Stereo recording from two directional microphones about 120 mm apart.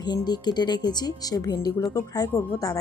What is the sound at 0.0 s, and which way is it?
A woman's voice, 35° left (ahead or behind).